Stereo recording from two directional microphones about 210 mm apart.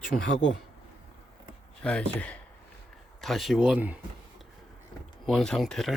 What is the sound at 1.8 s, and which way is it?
Speech, 5° left (ahead or behind).